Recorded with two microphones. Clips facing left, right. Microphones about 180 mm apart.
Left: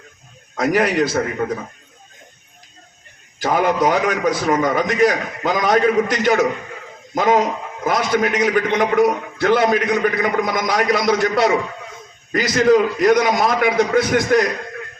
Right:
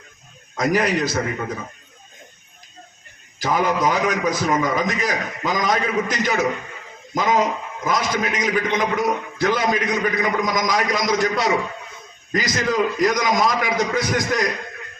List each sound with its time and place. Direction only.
0.5 s a man's voice: 60° left (ahead or behind)
3.4 s a man's voice: 60° left (ahead or behind)